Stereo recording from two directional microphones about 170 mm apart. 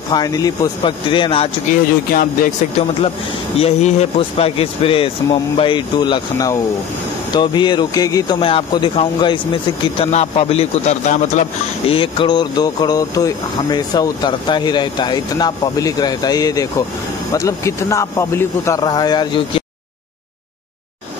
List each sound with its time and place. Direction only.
0.1 s speech: 20° left (ahead or behind)
1.7 s speech: 55° left (ahead or behind)
3.5 s speech: 40° left (ahead or behind)
11.9 s speech: 30° left (ahead or behind)